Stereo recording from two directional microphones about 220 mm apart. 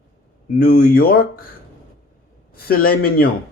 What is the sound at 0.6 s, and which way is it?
Speech, 45° left (ahead or behind).